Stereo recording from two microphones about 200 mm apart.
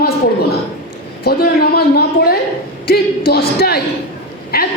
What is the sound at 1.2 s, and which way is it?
A woman's voice, 50° left (ahead or behind).